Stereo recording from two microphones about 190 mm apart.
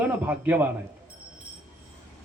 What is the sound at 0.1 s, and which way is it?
Speech, 10° right (ahead or behind).